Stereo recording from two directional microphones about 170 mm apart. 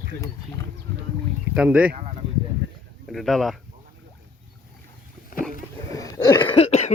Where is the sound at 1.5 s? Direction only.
5° right (ahead or behind).